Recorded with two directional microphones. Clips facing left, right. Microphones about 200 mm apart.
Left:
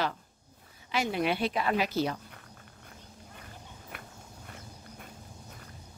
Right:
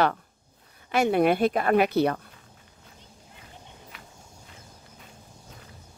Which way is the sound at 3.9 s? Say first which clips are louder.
Left 2 dB; 55° left (ahead or behind).